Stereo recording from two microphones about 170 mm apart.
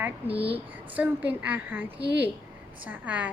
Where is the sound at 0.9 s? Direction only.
10° right (ahead or behind).